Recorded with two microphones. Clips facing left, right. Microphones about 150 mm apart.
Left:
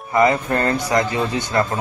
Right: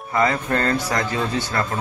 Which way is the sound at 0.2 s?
20° left (ahead or behind).